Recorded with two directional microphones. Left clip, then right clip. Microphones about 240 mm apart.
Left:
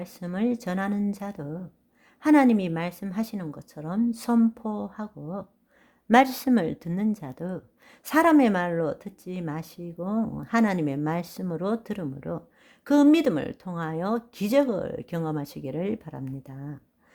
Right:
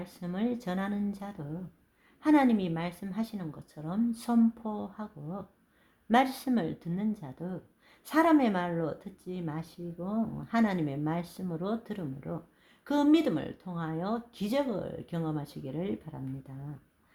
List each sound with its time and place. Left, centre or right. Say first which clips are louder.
0.0 s a woman's voice: left 6 dB; left